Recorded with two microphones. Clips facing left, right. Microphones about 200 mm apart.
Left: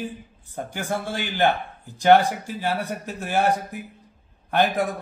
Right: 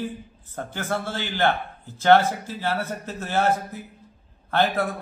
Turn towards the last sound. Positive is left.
turn(degrees=15)  # may be behind; listen again after turning